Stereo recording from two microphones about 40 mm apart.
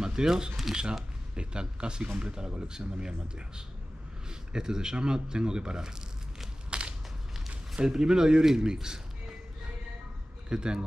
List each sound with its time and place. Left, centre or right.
0.0 s speech: centre
0.7 s speech: centre
1.3 s speech: right
6.7 s a sound: right
7.3 s speech: centre
10.5 s speech: right